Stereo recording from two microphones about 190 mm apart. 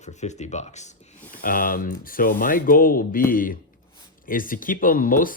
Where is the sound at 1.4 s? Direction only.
50° left (ahead or behind).